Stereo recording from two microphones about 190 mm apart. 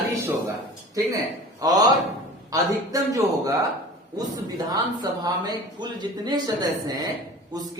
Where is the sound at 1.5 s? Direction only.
20° right (ahead or behind).